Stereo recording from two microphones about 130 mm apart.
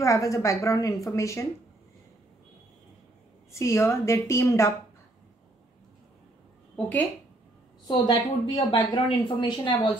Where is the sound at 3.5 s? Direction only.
20° left (ahead or behind).